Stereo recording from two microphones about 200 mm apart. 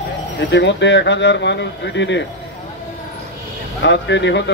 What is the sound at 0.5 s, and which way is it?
Speech, 60° left (ahead or behind).